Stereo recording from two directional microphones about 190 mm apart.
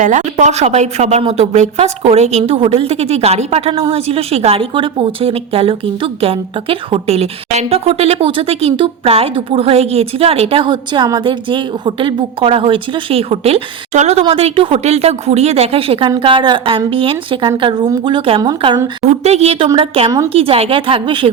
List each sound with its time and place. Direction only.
0.0 s a woman's voice: 40° right (ahead or behind); by 18.9 s 20° right (ahead or behind)
19.0 s a woman's voice: 35° right (ahead or behind)